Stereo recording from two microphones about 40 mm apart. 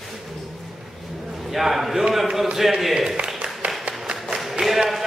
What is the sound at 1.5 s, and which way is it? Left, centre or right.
A man's voice, centre.